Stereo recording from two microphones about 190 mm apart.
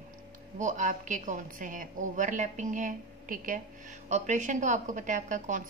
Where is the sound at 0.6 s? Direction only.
40° right (ahead or behind).